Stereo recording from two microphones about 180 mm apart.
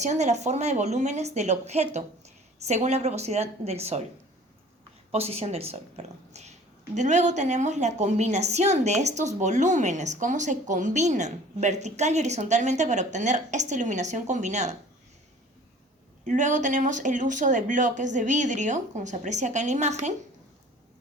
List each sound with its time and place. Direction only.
0.0 s a woman's voice: 40° right (ahead or behind)
5.1 s a woman's voice: 35° right (ahead or behind)
16.2 s speech: 45° right (ahead or behind)